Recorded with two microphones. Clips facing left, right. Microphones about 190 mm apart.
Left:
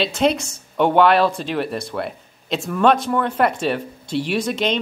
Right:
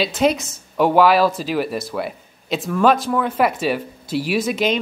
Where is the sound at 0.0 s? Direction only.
Centre (ahead or behind).